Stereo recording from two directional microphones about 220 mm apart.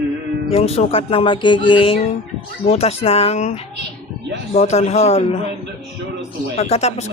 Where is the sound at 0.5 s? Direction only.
30° left (ahead or behind).